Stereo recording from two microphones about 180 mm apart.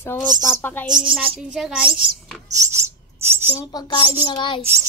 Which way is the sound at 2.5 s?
15° right (ahead or behind).